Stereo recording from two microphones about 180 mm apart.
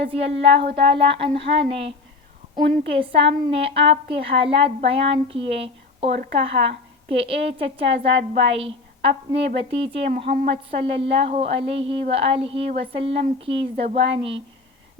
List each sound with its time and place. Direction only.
0.0 s a woman's voice: 35° right (ahead or behind)
2.9 s a woman's voice: 30° right (ahead or behind)